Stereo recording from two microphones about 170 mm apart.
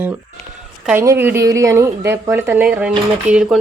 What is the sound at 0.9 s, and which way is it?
Speech, 15° right (ahead or behind).